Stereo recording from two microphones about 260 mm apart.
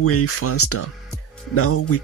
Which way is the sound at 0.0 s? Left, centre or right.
Left.